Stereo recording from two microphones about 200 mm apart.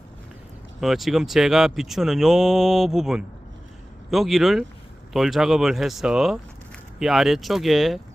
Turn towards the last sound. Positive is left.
turn(degrees=0)  # may be behind; listen again after turning